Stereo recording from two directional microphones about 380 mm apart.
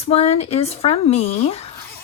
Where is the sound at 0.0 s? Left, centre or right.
Centre.